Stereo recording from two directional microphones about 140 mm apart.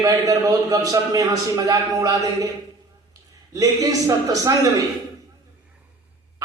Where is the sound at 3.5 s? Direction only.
25° right (ahead or behind).